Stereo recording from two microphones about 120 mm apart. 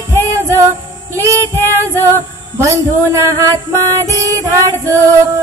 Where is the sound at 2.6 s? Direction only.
25° right (ahead or behind).